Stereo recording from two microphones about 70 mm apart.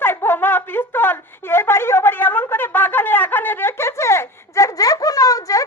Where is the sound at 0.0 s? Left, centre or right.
Left.